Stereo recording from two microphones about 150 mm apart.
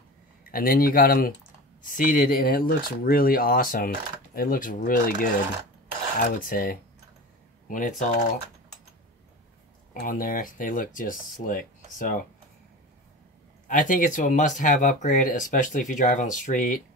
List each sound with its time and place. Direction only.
0.5 s speech: 75° left (ahead or behind)
7.6 s speech: 60° left (ahead or behind)
9.9 s speech: 70° left (ahead or behind)
13.7 s speech: 60° left (ahead or behind)